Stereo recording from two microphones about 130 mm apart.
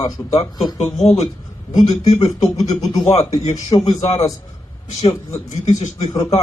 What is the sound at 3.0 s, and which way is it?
Speech, 45° left (ahead or behind).